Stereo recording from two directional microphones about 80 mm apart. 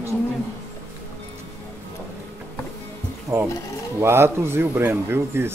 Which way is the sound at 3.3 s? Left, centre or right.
Right.